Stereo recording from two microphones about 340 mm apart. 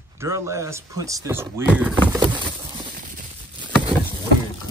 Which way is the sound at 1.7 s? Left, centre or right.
Centre.